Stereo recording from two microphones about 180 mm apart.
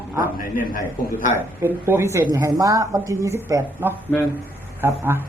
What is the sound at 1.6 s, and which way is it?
A man's voice, 15° right (ahead or behind).